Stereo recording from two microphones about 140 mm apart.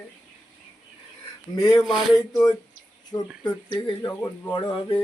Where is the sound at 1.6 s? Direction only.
30° left (ahead or behind).